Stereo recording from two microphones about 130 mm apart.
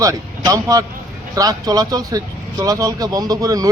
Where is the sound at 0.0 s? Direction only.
25° right (ahead or behind).